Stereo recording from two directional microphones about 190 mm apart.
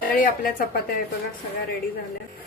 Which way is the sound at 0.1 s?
50° left (ahead or behind).